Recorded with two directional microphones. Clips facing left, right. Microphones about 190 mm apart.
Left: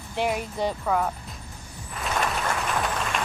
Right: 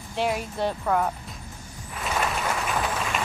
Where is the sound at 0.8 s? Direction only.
Centre (ahead or behind).